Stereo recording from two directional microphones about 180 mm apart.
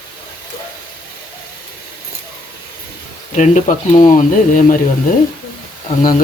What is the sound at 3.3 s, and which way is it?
Speech, 45° left (ahead or behind).